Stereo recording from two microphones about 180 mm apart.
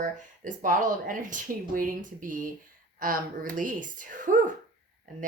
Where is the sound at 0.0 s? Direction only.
45° right (ahead or behind).